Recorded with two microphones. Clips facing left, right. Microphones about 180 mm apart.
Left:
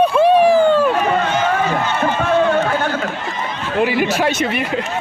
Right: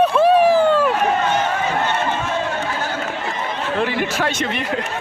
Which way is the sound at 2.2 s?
60° left (ahead or behind).